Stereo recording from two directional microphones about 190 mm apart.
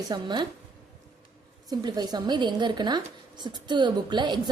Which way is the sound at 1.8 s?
20° right (ahead or behind).